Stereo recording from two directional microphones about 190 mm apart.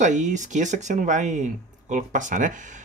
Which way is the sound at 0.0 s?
40° right (ahead or behind).